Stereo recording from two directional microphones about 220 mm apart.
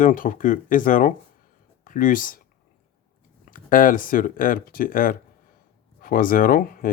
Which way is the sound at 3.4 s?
40° left (ahead or behind).